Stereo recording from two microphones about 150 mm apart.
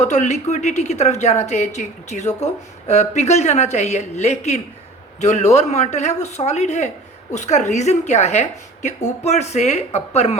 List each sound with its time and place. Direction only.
0.0 s a woman's voice: 50° left (ahead or behind)